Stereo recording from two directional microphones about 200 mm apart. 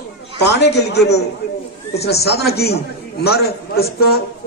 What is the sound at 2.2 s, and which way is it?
A man's voice, 55° left (ahead or behind).